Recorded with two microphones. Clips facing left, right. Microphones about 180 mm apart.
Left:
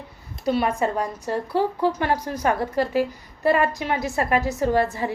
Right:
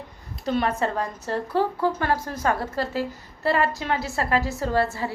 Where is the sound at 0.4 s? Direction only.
10° left (ahead or behind).